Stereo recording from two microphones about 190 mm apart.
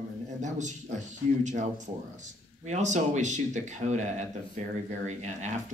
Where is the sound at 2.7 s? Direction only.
40° right (ahead or behind).